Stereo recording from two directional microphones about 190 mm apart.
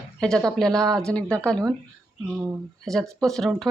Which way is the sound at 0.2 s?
5° left (ahead or behind).